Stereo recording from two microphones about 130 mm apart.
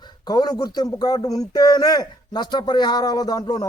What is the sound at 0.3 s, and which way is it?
A man's voice, 30° left (ahead or behind).